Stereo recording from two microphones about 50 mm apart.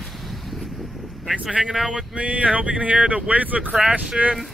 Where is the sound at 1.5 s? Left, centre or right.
Centre.